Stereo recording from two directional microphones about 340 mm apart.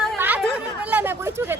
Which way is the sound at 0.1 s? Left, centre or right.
Centre.